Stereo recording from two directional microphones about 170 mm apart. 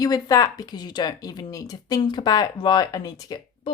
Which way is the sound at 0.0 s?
20° left (ahead or behind).